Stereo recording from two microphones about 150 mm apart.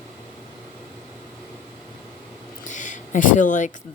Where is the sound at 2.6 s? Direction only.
55° left (ahead or behind).